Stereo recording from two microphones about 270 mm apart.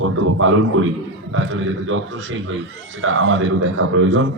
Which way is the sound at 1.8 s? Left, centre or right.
Right.